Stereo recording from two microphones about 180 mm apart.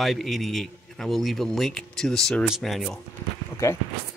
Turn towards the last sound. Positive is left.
turn(degrees=15)  # may be behind; listen again after turning